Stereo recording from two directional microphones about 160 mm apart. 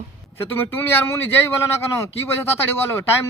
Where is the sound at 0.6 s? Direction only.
15° left (ahead or behind).